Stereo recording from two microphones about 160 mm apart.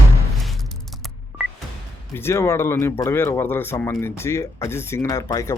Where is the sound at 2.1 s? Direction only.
15° left (ahead or behind).